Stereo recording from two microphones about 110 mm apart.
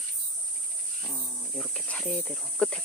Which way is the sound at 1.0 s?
5° left (ahead or behind).